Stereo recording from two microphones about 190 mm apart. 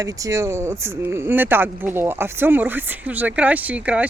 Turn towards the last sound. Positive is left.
turn(degrees=-5)  # may be behind; listen again after turning